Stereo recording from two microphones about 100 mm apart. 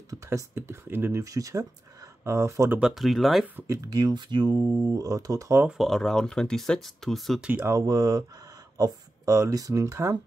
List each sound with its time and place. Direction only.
0.1 s speech: 30° right (ahead or behind)
1.2 s speech: 35° right (ahead or behind)
2.8 s speech: centre (ahead or behind)
3.5 s speech: 30° right (ahead or behind)
3.9 s speech: 45° right (ahead or behind)
5.7 s speech: centre (ahead or behind)
7.4 s speech: 15° right (ahead or behind)
7.7 s speech: 40° right (ahead or behind)